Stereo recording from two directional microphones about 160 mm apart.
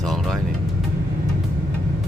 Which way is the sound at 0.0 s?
Centre (ahead or behind).